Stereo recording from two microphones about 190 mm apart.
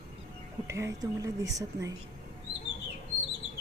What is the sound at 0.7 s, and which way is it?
Speech, 15° right (ahead or behind).